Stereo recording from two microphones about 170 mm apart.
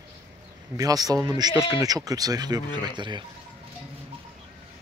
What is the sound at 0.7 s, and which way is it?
Speech, 20° right (ahead or behind).